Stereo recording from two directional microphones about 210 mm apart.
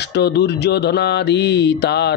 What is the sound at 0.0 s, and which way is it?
A man's voice, 55° left (ahead or behind).